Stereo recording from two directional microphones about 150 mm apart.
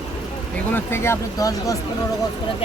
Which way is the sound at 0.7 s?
15° left (ahead or behind).